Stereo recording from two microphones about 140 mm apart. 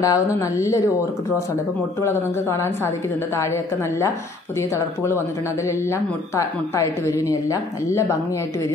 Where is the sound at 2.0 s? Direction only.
20° left (ahead or behind).